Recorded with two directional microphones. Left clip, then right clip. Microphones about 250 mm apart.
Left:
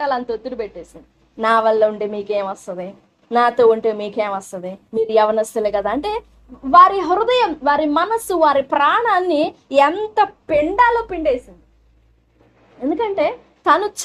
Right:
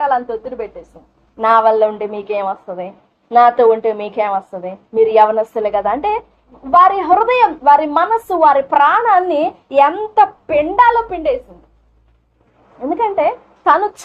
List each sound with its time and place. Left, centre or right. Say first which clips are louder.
0.0 s a woman's voice: right 4 dB; left
12.8 s a woman's voice: right 4 dB; left